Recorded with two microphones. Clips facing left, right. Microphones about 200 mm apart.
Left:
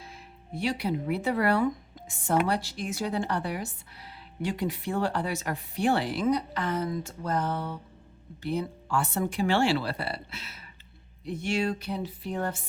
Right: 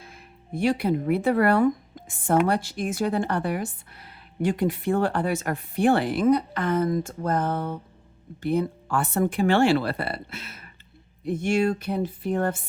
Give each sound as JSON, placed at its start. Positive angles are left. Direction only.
{"t": 0.0, "sound": "speech", "side_deg": -50}